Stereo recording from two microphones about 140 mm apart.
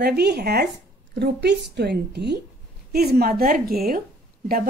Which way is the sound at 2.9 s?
90° right.